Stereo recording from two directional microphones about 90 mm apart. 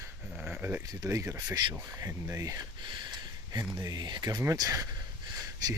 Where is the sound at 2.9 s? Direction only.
55° right (ahead or behind).